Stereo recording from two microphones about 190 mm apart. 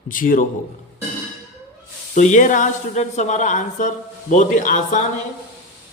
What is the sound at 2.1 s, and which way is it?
A man's voice, 40° left (ahead or behind).